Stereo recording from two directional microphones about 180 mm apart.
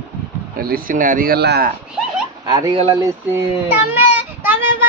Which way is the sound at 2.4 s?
25° right (ahead or behind).